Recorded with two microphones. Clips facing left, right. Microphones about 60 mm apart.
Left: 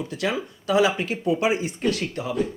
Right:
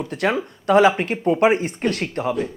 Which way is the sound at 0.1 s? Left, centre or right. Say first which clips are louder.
Right 7 dB; right.